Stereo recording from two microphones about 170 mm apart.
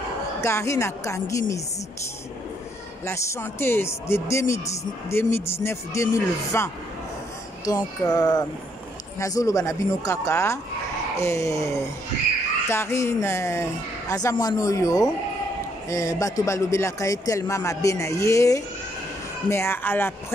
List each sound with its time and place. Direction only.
0.4 s speech: 15° left (ahead or behind)
3.1 s speech: 15° left (ahead or behind)